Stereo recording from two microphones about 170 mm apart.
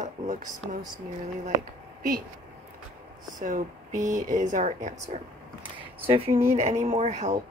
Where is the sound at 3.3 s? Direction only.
50° right (ahead or behind).